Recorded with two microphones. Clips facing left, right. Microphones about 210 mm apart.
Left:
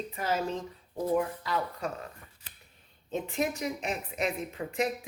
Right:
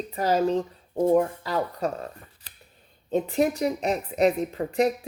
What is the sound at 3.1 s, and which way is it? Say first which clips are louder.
Speech: right 8 dB; 35° right (ahead or behind).